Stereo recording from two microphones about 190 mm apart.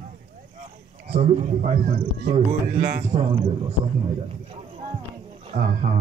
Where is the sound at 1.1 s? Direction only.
35° right (ahead or behind).